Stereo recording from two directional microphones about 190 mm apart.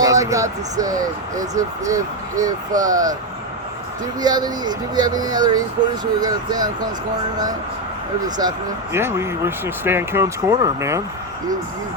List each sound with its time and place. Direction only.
0.0 s speech: 15° right (ahead or behind)
4.2 s speech: 20° right (ahead or behind)
8.4 s speech: 15° right (ahead or behind)